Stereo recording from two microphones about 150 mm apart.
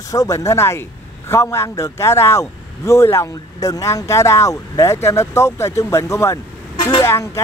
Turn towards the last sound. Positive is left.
turn(degrees=20)  # may be behind; listen again after turning